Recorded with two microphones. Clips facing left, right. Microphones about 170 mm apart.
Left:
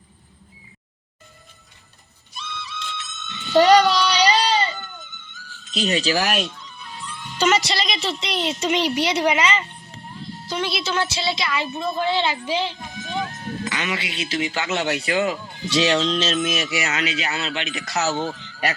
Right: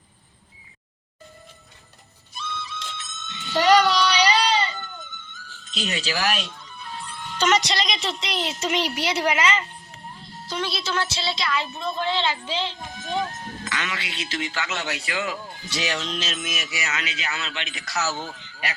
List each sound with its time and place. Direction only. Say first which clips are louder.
2.3 s music: right 1 dB; 50° right (ahead or behind)
4.3 s a sound: left 2 dB; 30° left (ahead or behind)
4.9 s music: right 1 dB; 50° right (ahead or behind)
6.0 s speech: left 1 dB; 45° left (ahead or behind)
6.5 s music: right 1 dB; 50° right (ahead or behind)
7.3 s a woman's voice: left 2 dB; 10° left (ahead or behind)
12.8 s music: right 1 dB; 50° right (ahead or behind)
13.7 s a man's voice: left 3 dB; 15° left (ahead or behind)
14.8 s speech: left 7 dB; 55° left (ahead or behind)
15.0 s speech: left 9 dB; 35° left (ahead or behind)
15.3 s speech: left 7 dB; 25° left (ahead or behind)
17.7 s speech: left 8 dB; 45° left (ahead or behind)
17.9 s speech: left 5 dB; 25° left (ahead or behind)
18.3 s a sound: left 8 dB; 40° left (ahead or behind)